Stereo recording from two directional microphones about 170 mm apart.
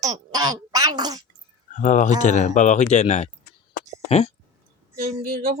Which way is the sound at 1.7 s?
45° left (ahead or behind).